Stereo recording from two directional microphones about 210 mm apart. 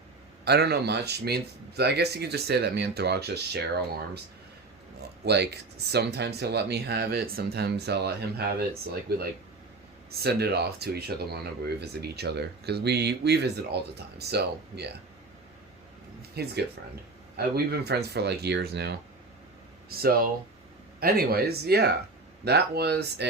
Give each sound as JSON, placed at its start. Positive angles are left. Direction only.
{"t": 0.4, "sound": "speech", "side_deg": -50}
{"t": 4.9, "sound": "speech", "side_deg": -50}
{"t": 16.3, "sound": "speech", "side_deg": -50}